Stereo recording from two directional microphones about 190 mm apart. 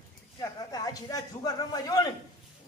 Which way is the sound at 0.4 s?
20° left (ahead or behind).